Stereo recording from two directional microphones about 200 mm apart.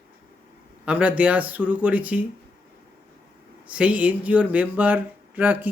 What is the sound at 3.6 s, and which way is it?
Speech, 5° right (ahead or behind).